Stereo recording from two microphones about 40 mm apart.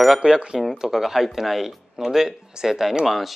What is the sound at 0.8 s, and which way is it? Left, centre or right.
Speech, centre.